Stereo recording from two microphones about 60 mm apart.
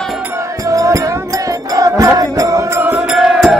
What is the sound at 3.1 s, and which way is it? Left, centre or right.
Music, centre.